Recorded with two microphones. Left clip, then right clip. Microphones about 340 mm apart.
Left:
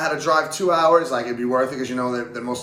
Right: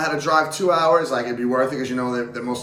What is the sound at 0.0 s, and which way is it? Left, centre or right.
Speech, centre.